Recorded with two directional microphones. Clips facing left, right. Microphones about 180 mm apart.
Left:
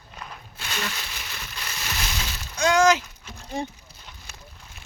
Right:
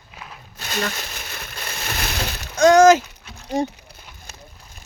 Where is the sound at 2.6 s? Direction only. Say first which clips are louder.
Right 8 dB; 45° right (ahead or behind).